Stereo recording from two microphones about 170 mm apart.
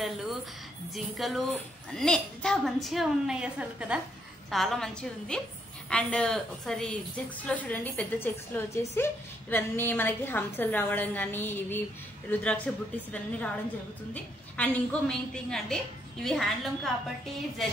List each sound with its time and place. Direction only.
0.9 s a woman's voice: centre (ahead or behind)